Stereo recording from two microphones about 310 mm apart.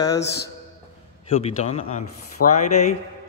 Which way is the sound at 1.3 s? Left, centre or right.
Centre.